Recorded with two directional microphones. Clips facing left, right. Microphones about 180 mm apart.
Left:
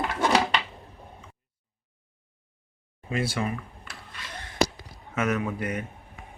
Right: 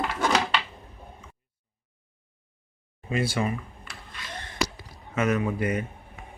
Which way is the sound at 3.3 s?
Centre (ahead or behind).